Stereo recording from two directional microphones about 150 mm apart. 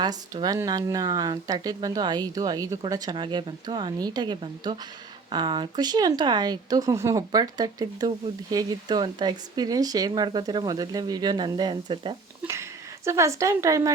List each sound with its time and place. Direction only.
0.0 s speech: 25° right (ahead or behind)
13.1 s speech: 20° right (ahead or behind)